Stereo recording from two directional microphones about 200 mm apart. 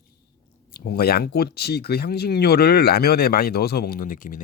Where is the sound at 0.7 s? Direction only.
50° left (ahead or behind).